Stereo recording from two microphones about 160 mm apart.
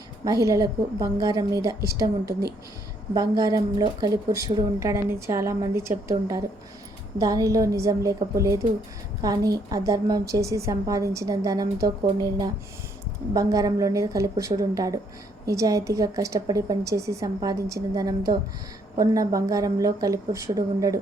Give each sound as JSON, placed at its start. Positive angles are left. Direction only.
{"t": 0.3, "sound": "a woman's voice", "side_deg": -20}